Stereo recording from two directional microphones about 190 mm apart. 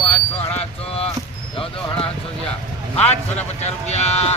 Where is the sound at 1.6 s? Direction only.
30° left (ahead or behind).